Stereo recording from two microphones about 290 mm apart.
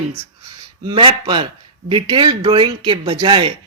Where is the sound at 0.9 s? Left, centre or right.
Centre.